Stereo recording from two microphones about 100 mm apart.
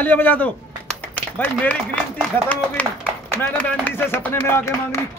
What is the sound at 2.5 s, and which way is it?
A man's voice, 20° left (ahead or behind).